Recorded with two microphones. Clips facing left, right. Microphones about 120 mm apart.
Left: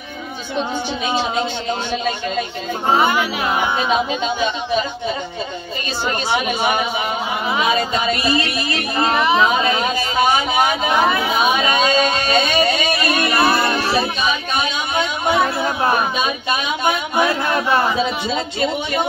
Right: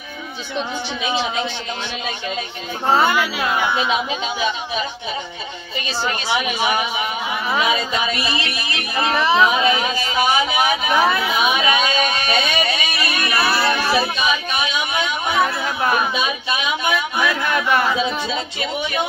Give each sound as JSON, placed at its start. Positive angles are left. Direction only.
{"t": 1.0, "sound": "music", "side_deg": 40}
{"t": 2.9, "sound": "music", "side_deg": 20}
{"t": 3.7, "sound": "music", "side_deg": 40}
{"t": 6.2, "sound": "a woman's voice", "side_deg": 50}
{"t": 7.6, "sound": "music", "side_deg": 40}
{"t": 9.1, "sound": "speech", "side_deg": 15}
{"t": 9.5, "sound": "a sound", "side_deg": 35}
{"t": 10.9, "sound": "speech", "side_deg": 20}
{"t": 11.3, "sound": "a sound", "side_deg": 40}
{"t": 13.4, "sound": "child singing", "side_deg": 20}
{"t": 14.6, "sound": "a sound", "side_deg": 40}
{"t": 15.2, "sound": "speech", "side_deg": 30}